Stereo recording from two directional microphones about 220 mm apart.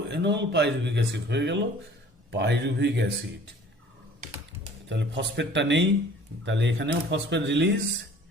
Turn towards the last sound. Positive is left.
turn(degrees=-55)  # may be behind; listen again after turning